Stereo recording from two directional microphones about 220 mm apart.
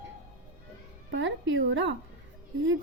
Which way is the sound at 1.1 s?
60° right (ahead or behind).